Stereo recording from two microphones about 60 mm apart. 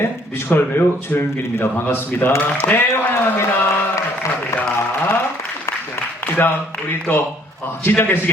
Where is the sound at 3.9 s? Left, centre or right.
Left.